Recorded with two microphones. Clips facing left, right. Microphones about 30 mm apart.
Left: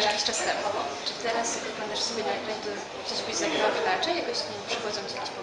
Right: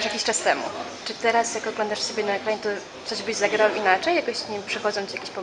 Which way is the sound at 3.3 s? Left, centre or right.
Right.